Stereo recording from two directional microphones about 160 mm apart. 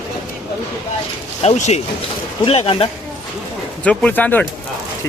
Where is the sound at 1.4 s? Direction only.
45° left (ahead or behind).